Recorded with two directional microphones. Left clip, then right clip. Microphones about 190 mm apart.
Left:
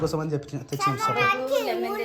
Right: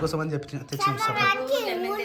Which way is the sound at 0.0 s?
10° left (ahead or behind).